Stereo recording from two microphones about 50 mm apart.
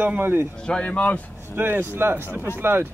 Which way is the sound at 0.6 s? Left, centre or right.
Centre.